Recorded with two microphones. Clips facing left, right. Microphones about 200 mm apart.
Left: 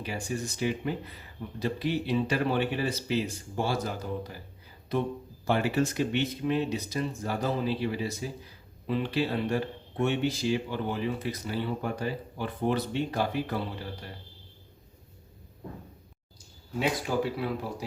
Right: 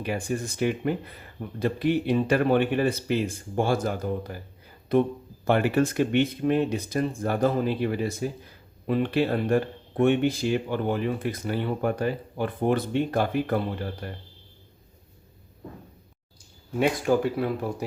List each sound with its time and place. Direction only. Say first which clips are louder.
0.0 s speech: right 5 dB; 55° right (ahead or behind)
17.3 s speech: right 5 dB; 50° right (ahead or behind)